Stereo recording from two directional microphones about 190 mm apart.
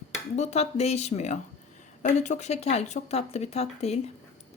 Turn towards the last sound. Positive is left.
turn(degrees=35)  # may be behind; listen again after turning